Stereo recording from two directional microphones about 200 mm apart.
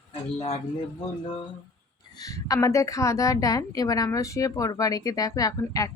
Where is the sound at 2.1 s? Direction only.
15° left (ahead or behind).